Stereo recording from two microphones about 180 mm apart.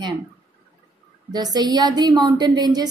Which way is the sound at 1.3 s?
20° right (ahead or behind).